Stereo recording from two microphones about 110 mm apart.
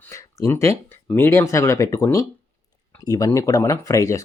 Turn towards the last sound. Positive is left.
turn(degrees=30)  # may be behind; listen again after turning